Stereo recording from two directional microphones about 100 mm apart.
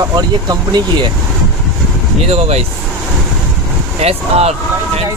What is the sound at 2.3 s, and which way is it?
Speech, 90° right.